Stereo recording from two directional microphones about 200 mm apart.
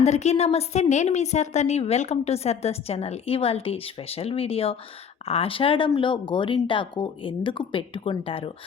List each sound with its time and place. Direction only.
0.0 s a woman's voice: 35° left (ahead or behind)